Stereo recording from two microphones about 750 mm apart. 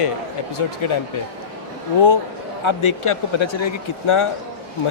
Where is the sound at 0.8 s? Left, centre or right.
Left.